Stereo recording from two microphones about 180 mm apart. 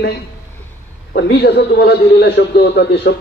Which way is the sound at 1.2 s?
70° left (ahead or behind).